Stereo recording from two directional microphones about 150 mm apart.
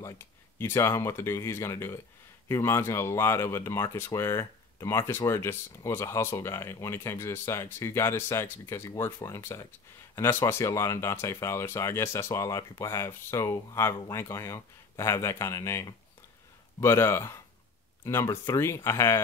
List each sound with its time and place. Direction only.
0.6 s speech: 15° left (ahead or behind)